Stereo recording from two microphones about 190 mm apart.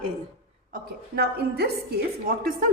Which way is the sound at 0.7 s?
55° right (ahead or behind).